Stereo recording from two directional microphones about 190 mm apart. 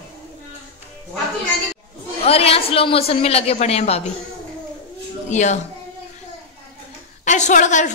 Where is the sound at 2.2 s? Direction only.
30° left (ahead or behind).